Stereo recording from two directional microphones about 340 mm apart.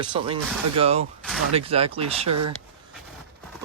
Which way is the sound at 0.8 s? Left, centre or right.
Centre.